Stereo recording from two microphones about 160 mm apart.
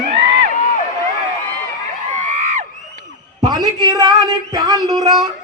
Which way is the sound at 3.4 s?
25° right (ahead or behind).